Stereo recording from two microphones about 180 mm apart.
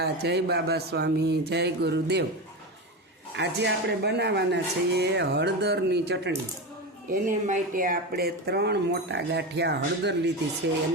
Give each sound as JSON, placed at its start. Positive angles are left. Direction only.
{"t": 0.0, "sound": "speech", "side_deg": -65}
{"t": 3.3, "sound": "speech", "side_deg": -70}
{"t": 7.1, "sound": "speech", "side_deg": -45}